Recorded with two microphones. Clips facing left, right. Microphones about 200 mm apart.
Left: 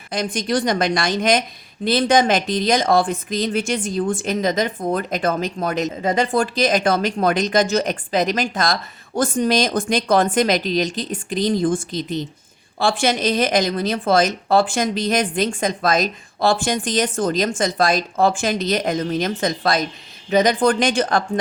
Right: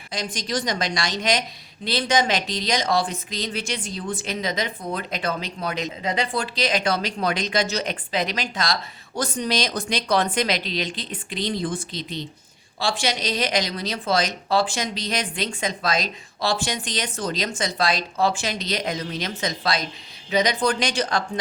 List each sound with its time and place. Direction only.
0.1 s a woman's voice: 55° left (ahead or behind)